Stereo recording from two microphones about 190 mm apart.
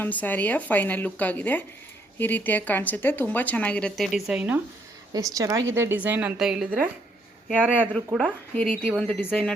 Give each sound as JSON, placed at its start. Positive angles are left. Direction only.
{"t": 0.0, "sound": "speech", "side_deg": 10}
{"t": 5.3, "sound": "a woman's voice", "side_deg": -20}
{"t": 7.9, "sound": "speech", "side_deg": 5}